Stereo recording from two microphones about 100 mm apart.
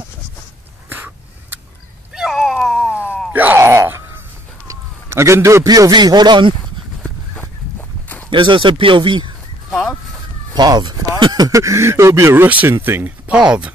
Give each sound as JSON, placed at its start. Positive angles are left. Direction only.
{"t": 0.8, "sound": "a sound", "side_deg": -20}
{"t": 2.1, "sound": "cat", "side_deg": -5}
{"t": 3.3, "sound": "groan", "side_deg": -20}
{"t": 4.6, "sound": "a sound", "side_deg": -30}
{"t": 5.7, "sound": "speech", "side_deg": -40}
{"t": 8.3, "sound": "speech", "side_deg": -55}
{"t": 10.5, "sound": "speech", "side_deg": -45}
{"t": 11.4, "sound": "speech", "side_deg": -30}
{"t": 12.4, "sound": "speech", "side_deg": -15}